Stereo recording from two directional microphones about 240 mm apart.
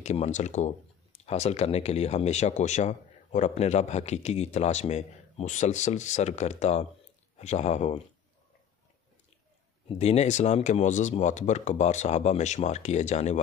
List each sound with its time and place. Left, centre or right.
0.0 s speech: left
9.8 s speech: left